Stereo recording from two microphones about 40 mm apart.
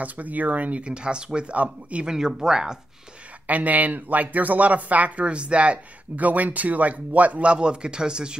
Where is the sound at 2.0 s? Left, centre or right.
Centre.